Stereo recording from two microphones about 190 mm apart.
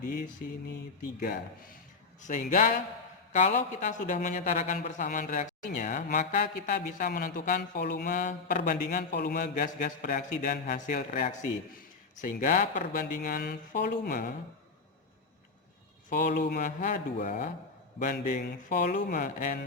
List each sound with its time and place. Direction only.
0.0 s a man's voice: 45° left (ahead or behind)
2.2 s a man's voice: 40° left (ahead or behind)
16.0 s a man's voice: 45° left (ahead or behind)
18.9 s a man's voice: 55° left (ahead or behind)